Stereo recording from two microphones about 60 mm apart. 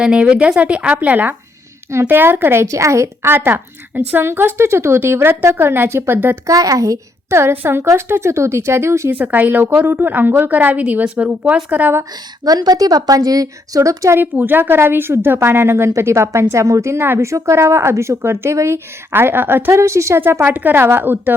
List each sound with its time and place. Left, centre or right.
0.0 s a woman's voice: centre; by 2.6 s right
2.6 s a woman's voice: right
3.2 s a woman's voice: right
6.5 s a woman's voice: right
7.3 s a woman's voice: right
9.1 s a woman's voice: right
12.5 s a woman's voice: right
14.2 s a woman's voice: right
19.1 s a woman's voice: right
19.7 s a woman's voice: right
20.4 s a woman's voice: right